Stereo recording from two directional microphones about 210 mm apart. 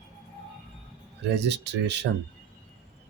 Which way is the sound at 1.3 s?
55° right (ahead or behind).